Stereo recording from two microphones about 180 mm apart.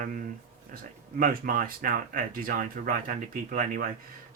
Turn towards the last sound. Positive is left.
turn(degrees=-45)  # may be behind; listen again after turning